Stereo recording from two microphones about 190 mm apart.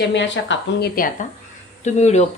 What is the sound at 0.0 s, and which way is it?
Speech, 70° left (ahead or behind).